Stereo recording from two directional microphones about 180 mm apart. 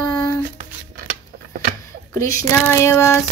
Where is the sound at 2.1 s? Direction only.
15° left (ahead or behind).